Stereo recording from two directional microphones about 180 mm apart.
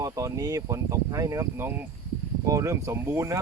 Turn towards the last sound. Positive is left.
turn(degrees=-15)  # may be behind; listen again after turning